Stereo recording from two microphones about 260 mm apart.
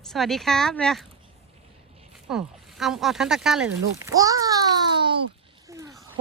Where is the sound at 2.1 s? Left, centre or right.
Centre.